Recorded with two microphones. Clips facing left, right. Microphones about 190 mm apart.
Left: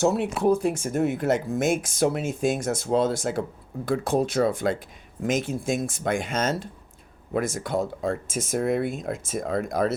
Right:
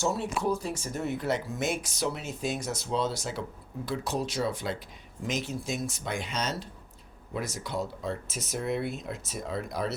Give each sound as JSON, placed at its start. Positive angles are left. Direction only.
{"t": 0.0, "sound": "speech", "side_deg": 60}